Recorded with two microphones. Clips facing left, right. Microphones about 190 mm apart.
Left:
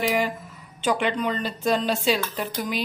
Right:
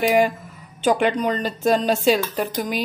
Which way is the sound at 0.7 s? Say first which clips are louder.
Right 5 dB; 45° right (ahead or behind).